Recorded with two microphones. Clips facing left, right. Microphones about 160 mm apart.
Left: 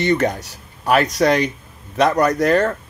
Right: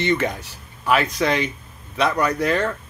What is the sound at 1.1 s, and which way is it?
Speech, 40° left (ahead or behind).